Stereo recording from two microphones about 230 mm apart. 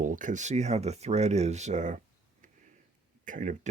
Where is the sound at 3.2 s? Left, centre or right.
Right.